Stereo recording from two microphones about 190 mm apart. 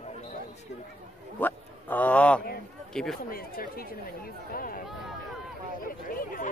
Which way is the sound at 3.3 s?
50° left (ahead or behind).